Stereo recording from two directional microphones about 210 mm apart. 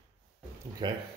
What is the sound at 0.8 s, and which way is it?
Speech, 20° right (ahead or behind).